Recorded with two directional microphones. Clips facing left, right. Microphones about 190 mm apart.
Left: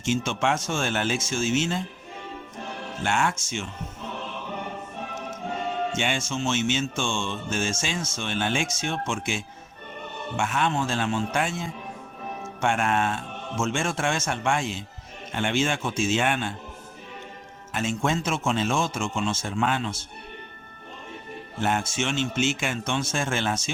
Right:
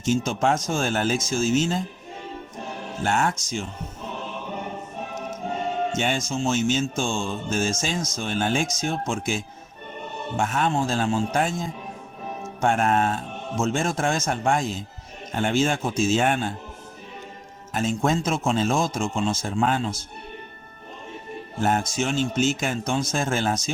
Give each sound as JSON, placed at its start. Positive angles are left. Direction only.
{"t": 0.0, "sound": "a man's voice", "side_deg": -40}
{"t": 3.0, "sound": "a man's voice", "side_deg": -40}
{"t": 5.9, "sound": "a man's voice", "side_deg": -40}
{"t": 17.7, "sound": "a man's voice", "side_deg": -40}
{"t": 21.6, "sound": "a man's voice", "side_deg": -40}